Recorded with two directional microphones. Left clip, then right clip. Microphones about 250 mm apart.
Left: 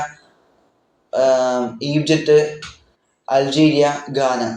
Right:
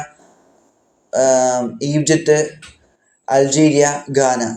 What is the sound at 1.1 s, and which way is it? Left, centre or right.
A man's voice, right.